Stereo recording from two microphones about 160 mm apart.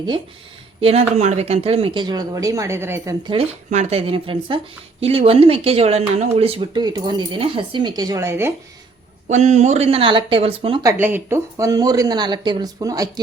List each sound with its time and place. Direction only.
0.8 s speech: 40° right (ahead or behind); by 3.2 s 15° right (ahead or behind)
3.7 s speech: 45° right (ahead or behind); by 8.5 s 15° right (ahead or behind)
9.3 s speech: 45° right (ahead or behind)
10.8 s speech: 15° right (ahead or behind)